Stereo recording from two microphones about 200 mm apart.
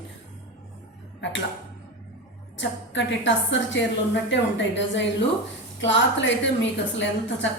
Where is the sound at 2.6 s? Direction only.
65° left (ahead or behind).